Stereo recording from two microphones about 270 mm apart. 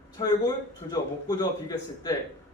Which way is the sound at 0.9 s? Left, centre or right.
Centre.